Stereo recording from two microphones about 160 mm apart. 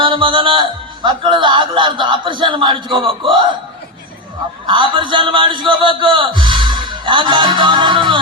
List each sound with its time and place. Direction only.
0.0 s a man's voice: 30° right (ahead or behind)
4.6 s a man's voice: 30° right (ahead or behind)